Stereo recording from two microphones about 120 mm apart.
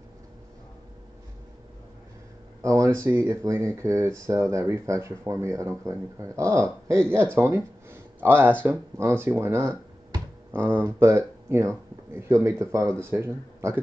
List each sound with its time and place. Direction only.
2.6 s speech: 25° right (ahead or behind)